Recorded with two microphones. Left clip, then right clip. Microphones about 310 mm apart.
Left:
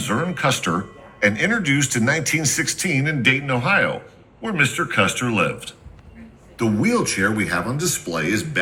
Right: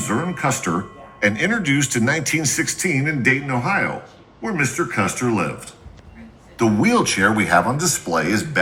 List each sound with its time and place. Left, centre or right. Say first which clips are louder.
0.0 s speech: left 1 dB; centre
6.6 s speech: right 3 dB; centre